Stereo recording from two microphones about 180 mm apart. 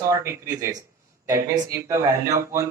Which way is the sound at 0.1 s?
15° right (ahead or behind).